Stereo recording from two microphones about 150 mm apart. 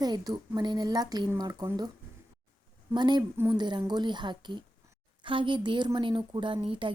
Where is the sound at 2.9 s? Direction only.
30° right (ahead or behind).